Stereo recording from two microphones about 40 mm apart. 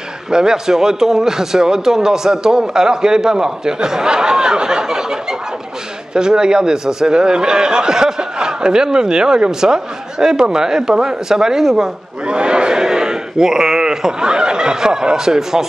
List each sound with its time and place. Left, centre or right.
0.3 s a man's voice: centre
12.3 s a man's voice: right